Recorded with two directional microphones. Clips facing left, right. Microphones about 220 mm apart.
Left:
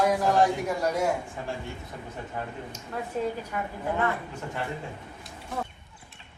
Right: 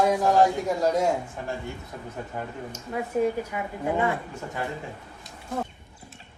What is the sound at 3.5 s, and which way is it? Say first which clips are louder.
Speech: right 3 dB; 10° right (ahead or behind).